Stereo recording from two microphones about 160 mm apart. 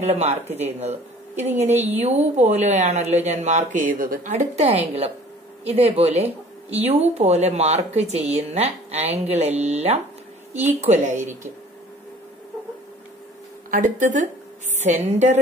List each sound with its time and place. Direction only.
0.0 s speech: 45° right (ahead or behind); by 4.3 s 60° right (ahead or behind)
4.3 s speech: 40° right (ahead or behind)
10.5 s a woman's voice: 10° right (ahead or behind)
10.8 s speech: 50° right (ahead or behind)
13.7 s speech: 55° right (ahead or behind)